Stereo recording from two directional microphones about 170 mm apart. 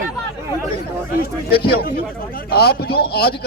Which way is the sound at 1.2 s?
65° left (ahead or behind).